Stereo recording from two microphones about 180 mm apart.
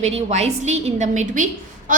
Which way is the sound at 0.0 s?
35° right (ahead or behind).